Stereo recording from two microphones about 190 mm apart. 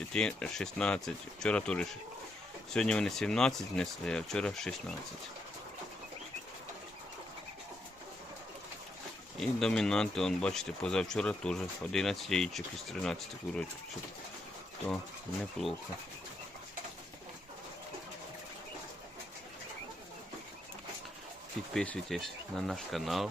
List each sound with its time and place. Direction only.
0.1 s speech: 5° left (ahead or behind)
9.4 s speech: 5° left (ahead or behind)
15.6 s speech: centre (ahead or behind)
21.7 s speech: 5° left (ahead or behind)